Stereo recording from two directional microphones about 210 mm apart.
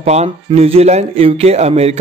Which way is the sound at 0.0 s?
30° right (ahead or behind).